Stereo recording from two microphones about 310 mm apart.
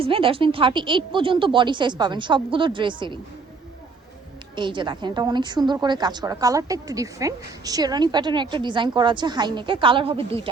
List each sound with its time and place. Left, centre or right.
0.0 s a woman's voice: centre
4.5 s a woman's voice: centre